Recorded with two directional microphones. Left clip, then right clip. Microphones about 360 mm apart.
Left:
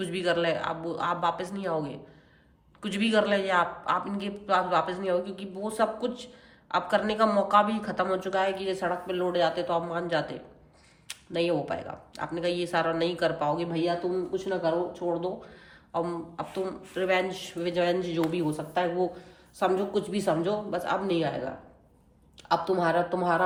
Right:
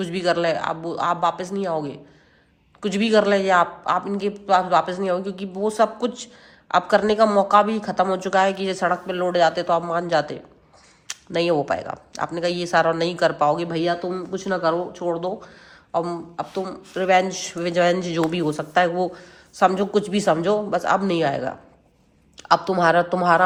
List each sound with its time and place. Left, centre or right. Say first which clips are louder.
0.0 s speech: right 6 dB; centre